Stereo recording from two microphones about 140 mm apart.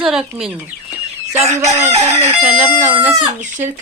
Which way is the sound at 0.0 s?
5° right (ahead or behind).